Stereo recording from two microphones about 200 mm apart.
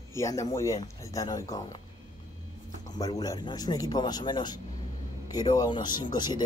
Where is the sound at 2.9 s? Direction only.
15° left (ahead or behind).